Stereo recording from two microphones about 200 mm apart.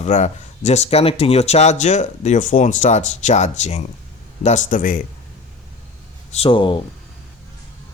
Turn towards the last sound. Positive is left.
turn(degrees=25)  # may be behind; listen again after turning